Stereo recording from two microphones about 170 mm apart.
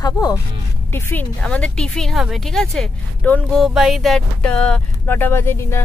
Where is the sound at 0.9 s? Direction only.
10° left (ahead or behind).